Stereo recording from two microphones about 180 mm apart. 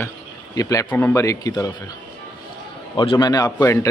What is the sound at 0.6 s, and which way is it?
Speech, 20° left (ahead or behind).